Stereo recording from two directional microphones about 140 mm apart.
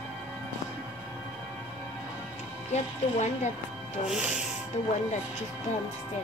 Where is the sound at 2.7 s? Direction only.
55° left (ahead or behind).